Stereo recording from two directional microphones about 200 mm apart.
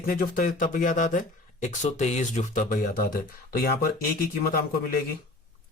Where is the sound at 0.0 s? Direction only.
45° left (ahead or behind).